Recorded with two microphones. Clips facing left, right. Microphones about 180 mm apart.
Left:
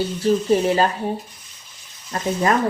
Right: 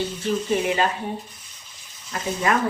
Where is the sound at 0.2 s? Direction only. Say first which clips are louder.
Left 7 dB; 35° left (ahead or behind).